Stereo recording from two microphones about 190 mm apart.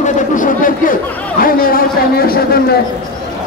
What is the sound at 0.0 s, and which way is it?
Chatter, 40° left (ahead or behind).